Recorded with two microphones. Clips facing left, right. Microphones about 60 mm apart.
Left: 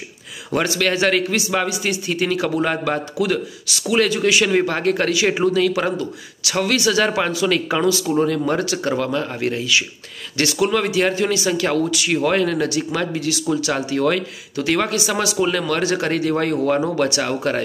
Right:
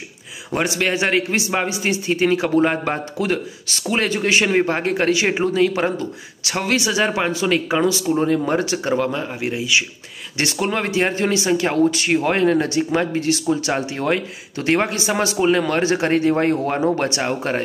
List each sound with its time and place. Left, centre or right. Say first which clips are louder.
0.5 s speech: left 1 dB; right
3.2 s speech: left 1 dB; right